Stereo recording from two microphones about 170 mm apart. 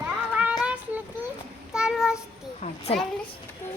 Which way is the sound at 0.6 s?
10° right (ahead or behind).